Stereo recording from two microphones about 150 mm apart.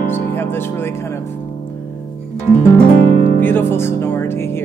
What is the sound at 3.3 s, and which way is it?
Speech, 10° left (ahead or behind).